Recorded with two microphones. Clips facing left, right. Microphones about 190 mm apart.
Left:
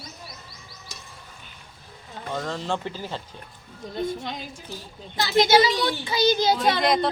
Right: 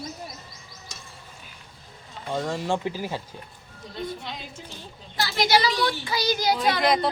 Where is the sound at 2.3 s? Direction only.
10° right (ahead or behind).